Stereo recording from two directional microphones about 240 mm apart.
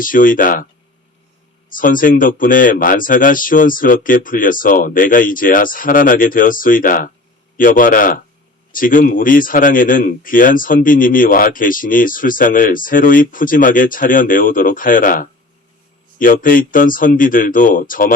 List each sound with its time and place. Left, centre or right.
0.0 s speech: left
1.7 s speech: left